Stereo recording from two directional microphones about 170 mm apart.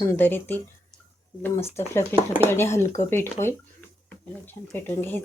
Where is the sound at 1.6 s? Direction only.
40° left (ahead or behind).